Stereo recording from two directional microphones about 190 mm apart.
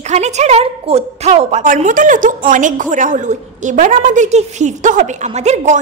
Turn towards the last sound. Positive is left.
turn(degrees=-40)  # may be behind; listen again after turning